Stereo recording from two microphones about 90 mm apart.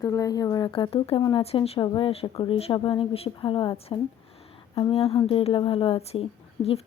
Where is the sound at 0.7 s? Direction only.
75° left (ahead or behind).